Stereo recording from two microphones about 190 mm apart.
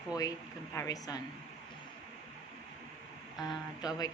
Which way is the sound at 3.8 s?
20° left (ahead or behind).